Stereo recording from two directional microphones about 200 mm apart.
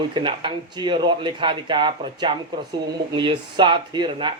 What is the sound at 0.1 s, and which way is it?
Speech, 25° right (ahead or behind).